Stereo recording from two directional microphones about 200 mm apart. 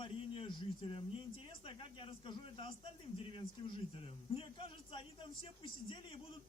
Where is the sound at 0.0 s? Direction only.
25° left (ahead or behind).